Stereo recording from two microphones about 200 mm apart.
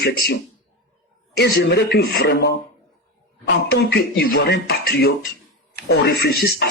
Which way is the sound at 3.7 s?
55° left (ahead or behind).